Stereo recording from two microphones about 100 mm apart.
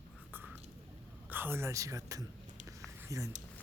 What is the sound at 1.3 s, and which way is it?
Speech, 20° right (ahead or behind).